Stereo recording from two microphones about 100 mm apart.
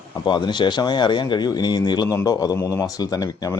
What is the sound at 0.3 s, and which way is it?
Speech, 50° left (ahead or behind).